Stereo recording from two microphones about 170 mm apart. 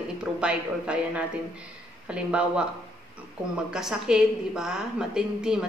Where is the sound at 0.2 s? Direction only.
5° right (ahead or behind).